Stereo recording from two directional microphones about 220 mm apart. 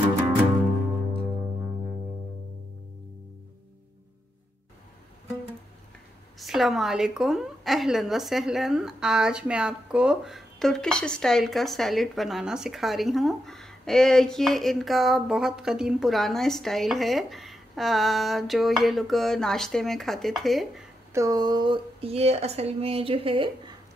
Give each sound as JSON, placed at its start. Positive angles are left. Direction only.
{"t": 6.4, "sound": "a woman's voice", "side_deg": 0}
{"t": 21.1, "sound": "speech", "side_deg": -15}